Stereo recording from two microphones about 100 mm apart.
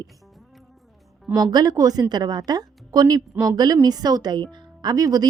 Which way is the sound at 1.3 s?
40° right (ahead or behind).